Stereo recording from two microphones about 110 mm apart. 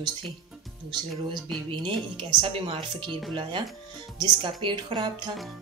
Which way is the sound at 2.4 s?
50° right (ahead or behind).